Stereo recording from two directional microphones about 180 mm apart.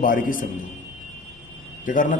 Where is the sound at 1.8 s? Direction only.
45° left (ahead or behind).